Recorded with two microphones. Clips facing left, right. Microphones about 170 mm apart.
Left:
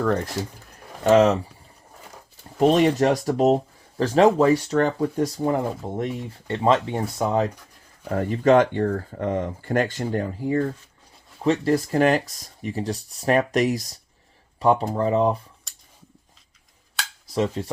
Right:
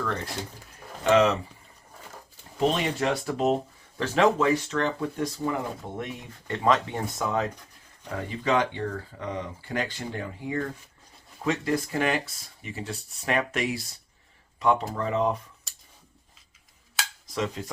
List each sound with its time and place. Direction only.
1.0 s speech: 40° left (ahead or behind)
2.6 s speech: 45° left (ahead or behind)
8.1 s speech: 50° left (ahead or behind)
17.3 s speech: 30° left (ahead or behind)